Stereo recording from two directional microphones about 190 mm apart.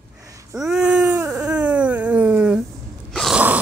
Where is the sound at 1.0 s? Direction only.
15° right (ahead or behind).